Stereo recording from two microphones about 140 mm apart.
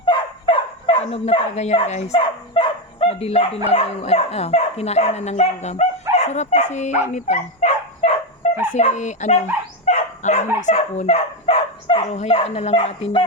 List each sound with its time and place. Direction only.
0.0 s dog: 35° left (ahead or behind)
1.2 s speech: 45° left (ahead or behind)
2.1 s dog: 35° left (ahead or behind)
3.7 s speech: 50° left (ahead or behind)
7.1 s dog: 60° left (ahead or behind)
8.7 s speech: 55° left (ahead or behind)
9.8 s dog: 50° left (ahead or behind)
10.6 s speech: 55° left (ahead or behind)